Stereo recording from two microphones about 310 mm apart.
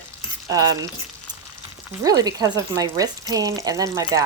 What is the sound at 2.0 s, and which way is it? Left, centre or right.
Stir, centre.